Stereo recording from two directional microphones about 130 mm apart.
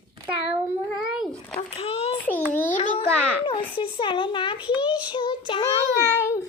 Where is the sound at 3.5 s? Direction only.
40° left (ahead or behind).